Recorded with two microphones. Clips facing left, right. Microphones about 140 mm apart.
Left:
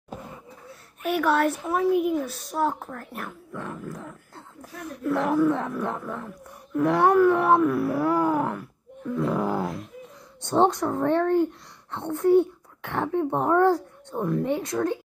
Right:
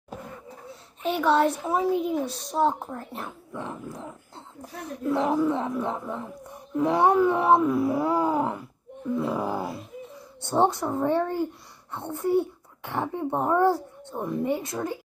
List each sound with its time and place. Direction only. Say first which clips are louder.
1.1 s speech: even; 20° right (ahead or behind)